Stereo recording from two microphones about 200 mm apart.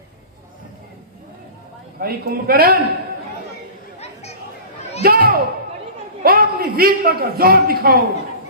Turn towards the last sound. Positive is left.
turn(degrees=-50)  # may be behind; listen again after turning